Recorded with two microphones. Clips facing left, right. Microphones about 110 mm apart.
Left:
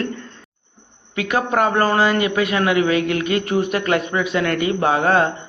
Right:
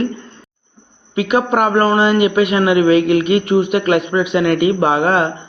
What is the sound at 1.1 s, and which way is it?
A man's voice, 20° right (ahead or behind).